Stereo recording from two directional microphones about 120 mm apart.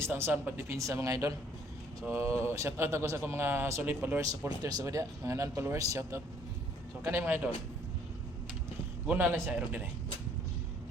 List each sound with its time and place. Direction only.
0.0 s speech: 20° right (ahead or behind)
4.3 s speech: 30° right (ahead or behind); by 7.4 s 15° right (ahead or behind)
9.0 s speech: 15° right (ahead or behind)